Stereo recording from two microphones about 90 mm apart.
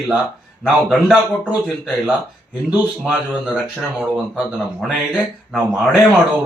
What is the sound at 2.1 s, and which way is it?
A man's voice, 15° right (ahead or behind).